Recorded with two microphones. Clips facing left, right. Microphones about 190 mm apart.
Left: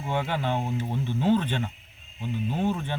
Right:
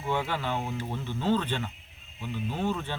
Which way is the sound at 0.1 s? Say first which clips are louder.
Left 2 dB; 20° left (ahead or behind).